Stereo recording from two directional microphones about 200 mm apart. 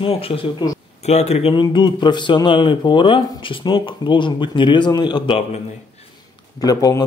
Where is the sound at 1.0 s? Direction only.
35° left (ahead or behind).